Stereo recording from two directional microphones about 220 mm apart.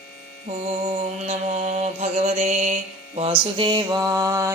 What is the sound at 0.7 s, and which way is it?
Mantra, 25° right (ahead or behind).